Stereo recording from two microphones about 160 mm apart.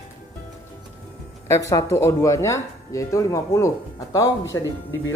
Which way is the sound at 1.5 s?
15° left (ahead or behind).